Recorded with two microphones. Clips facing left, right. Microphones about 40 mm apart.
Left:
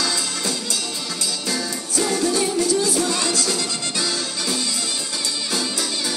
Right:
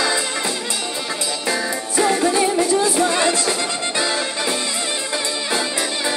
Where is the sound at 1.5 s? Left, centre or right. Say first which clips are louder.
Right 6 dB; right.